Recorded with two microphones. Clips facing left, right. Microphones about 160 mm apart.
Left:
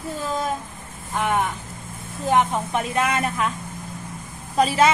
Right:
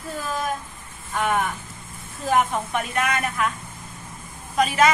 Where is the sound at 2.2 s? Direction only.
25° left (ahead or behind).